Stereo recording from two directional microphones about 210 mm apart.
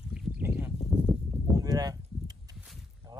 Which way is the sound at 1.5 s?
20° right (ahead or behind).